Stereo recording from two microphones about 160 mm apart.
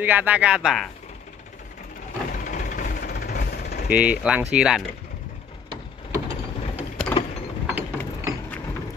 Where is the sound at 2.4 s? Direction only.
55° left (ahead or behind); by 3.9 s 75° left (ahead or behind).